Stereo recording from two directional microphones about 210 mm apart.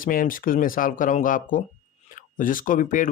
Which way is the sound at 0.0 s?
40° left (ahead or behind).